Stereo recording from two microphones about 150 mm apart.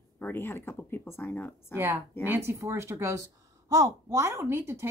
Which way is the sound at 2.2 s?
15° right (ahead or behind).